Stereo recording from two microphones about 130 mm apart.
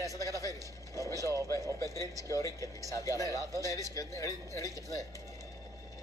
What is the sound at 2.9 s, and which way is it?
Speech, 25° left (ahead or behind).